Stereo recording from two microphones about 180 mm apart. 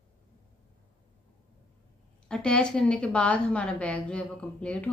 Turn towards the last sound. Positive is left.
turn(degrees=5)  # may be behind; listen again after turning